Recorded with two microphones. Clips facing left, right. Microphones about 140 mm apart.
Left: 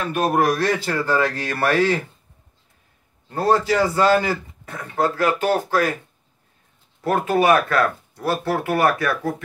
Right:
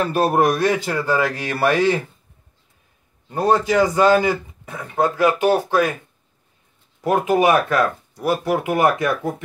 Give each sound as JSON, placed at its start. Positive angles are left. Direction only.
{"t": 0.1, "sound": "speech", "side_deg": -30}
{"t": 0.4, "sound": "a man's voice", "side_deg": -15}
{"t": 3.3, "sound": "a man's voice", "side_deg": -15}
{"t": 7.0, "sound": "a man's voice", "side_deg": -15}